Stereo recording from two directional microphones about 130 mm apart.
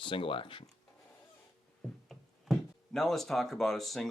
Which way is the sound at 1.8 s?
Centre (ahead or behind).